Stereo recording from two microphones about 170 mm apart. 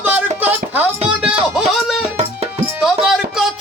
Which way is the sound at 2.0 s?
35° right (ahead or behind).